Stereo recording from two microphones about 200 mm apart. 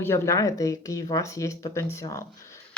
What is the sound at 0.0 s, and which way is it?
Speech, 10° left (ahead or behind).